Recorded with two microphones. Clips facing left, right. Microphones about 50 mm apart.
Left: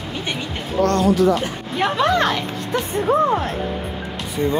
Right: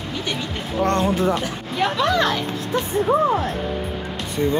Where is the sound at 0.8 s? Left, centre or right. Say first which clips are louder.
Left 3 dB; right.